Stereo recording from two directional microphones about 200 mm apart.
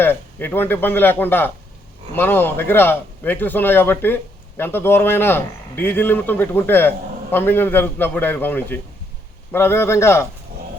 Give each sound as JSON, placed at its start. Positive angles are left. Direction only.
{"t": 0.0, "sound": "a man's voice", "side_deg": 10}